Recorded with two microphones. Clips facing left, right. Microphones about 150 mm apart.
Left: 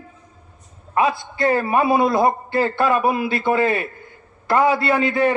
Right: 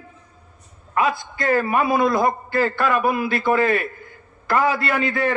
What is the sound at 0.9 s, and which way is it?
A man's voice, 25° left (ahead or behind).